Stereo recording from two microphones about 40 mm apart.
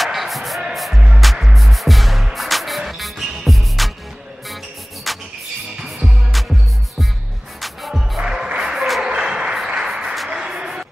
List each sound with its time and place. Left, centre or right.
0.0 s basketball bounce: centre
0.7 s music: centre
5.1 s music: centre
8.2 s music: centre
9.0 s a sound: centre
9.8 s applause: centre
10.3 s a sound: right